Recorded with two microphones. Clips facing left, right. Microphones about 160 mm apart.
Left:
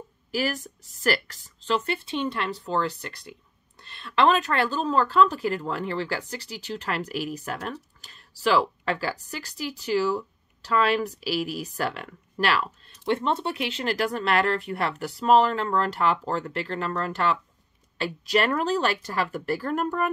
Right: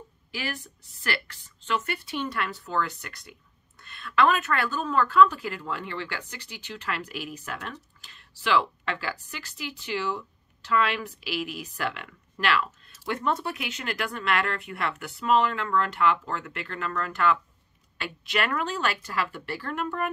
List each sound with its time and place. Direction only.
0.3 s speech: 40° left (ahead or behind)